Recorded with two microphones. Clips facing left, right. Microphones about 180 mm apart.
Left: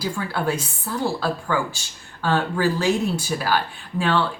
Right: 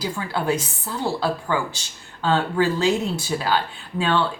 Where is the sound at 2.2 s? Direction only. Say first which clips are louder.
Right 1 dB; 20° right (ahead or behind).